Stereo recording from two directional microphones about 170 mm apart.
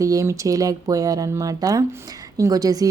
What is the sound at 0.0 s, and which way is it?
A woman's voice, 20° right (ahead or behind).